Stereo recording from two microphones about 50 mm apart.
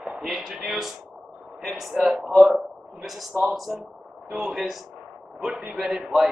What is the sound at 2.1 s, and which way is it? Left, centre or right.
Speech, right.